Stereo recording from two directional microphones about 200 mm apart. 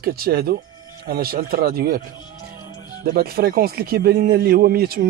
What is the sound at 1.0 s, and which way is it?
Speech, 50° right (ahead or behind).